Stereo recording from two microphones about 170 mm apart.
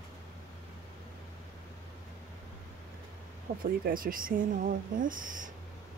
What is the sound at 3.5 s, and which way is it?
Speech, 60° right (ahead or behind).